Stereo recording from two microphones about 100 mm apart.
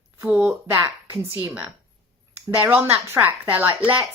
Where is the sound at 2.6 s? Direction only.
15° right (ahead or behind).